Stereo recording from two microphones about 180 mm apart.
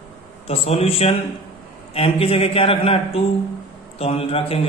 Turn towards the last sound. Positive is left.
turn(degrees=35)  # may be behind; listen again after turning